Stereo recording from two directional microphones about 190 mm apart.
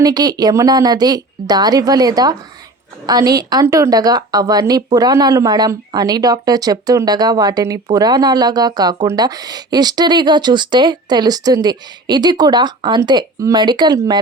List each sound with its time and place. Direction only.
0.0 s speech: 20° right (ahead or behind)